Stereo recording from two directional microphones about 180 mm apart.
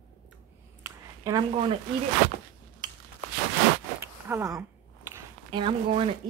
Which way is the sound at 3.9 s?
15° right (ahead or behind).